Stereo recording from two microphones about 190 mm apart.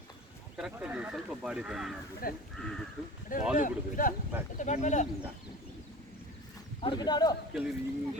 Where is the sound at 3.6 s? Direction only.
45° left (ahead or behind).